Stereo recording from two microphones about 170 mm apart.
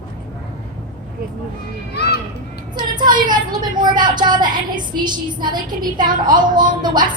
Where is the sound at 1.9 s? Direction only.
70° left (ahead or behind).